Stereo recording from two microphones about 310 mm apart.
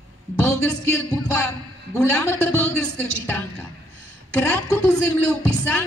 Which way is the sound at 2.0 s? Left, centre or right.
Centre.